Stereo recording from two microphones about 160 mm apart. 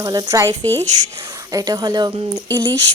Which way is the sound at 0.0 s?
25° right (ahead or behind).